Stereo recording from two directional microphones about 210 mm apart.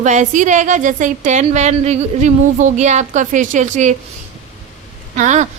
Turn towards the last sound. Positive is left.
turn(degrees=-35)  # may be behind; listen again after turning